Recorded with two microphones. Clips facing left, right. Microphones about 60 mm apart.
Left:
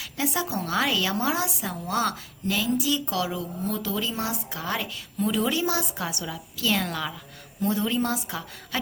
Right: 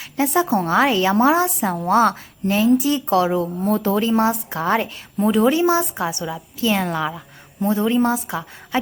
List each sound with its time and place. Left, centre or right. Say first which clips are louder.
0.0 s a woman's voice: right 9 dB; right